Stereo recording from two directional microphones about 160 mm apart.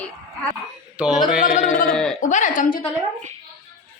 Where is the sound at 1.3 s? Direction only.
55° left (ahead or behind).